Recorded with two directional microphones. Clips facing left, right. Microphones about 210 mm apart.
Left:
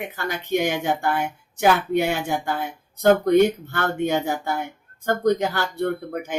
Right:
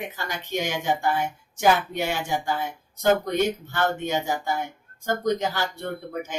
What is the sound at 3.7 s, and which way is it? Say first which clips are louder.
Speech: left 2 dB; 55° left (ahead or behind).